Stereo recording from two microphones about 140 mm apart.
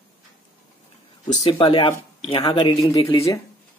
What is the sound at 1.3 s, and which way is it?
Speech, 40° left (ahead or behind).